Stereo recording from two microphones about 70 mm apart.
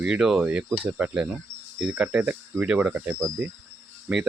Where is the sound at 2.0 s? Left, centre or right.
Right.